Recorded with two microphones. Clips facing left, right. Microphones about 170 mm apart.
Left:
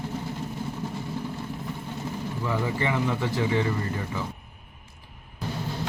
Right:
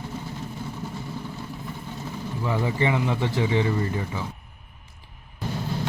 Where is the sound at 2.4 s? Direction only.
20° right (ahead or behind).